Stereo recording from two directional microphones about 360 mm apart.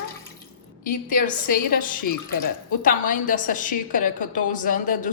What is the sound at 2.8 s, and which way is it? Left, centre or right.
A woman's voice, left.